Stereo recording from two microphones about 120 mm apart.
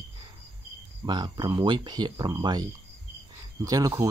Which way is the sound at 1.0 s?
35° right (ahead or behind).